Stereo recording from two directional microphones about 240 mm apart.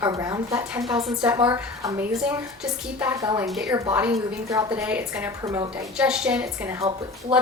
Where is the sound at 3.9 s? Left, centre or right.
Centre.